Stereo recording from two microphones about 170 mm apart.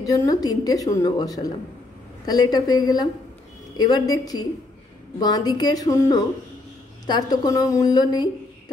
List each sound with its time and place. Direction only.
0.0 s a woman's voice: 20° left (ahead or behind)
5.2 s a woman's voice: 25° left (ahead or behind)